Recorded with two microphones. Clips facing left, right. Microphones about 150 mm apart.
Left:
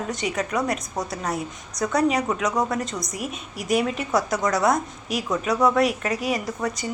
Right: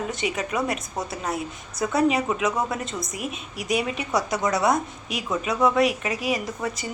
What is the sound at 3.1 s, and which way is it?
Speech, 45° left (ahead or behind).